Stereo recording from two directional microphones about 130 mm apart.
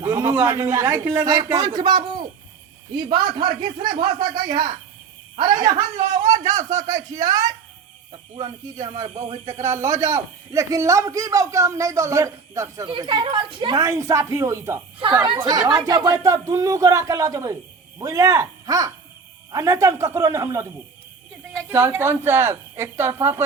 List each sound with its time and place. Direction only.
0.0 s a man's voice: 20° right (ahead or behind)
1.2 s a man's voice: 30° right (ahead or behind)
12.9 s speech: 35° right (ahead or behind)
13.7 s a man's voice: 25° right (ahead or behind)
15.3 s a man's voice: 35° right (ahead or behind); by 23.4 s 20° right (ahead or behind)